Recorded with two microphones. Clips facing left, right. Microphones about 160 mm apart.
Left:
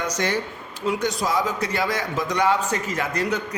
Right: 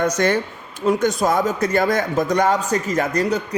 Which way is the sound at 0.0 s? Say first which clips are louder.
Right 6 dB; 50° right (ahead or behind).